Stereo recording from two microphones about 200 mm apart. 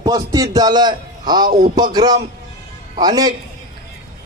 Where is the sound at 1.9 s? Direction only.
20° right (ahead or behind).